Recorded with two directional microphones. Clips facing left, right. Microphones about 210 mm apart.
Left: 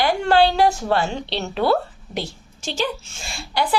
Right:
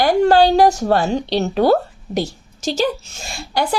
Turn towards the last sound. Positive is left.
turn(degrees=-45)  # may be behind; listen again after turning